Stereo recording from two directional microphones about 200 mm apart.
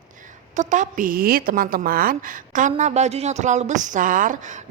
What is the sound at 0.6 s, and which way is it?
A woman's voice, 40° right (ahead or behind).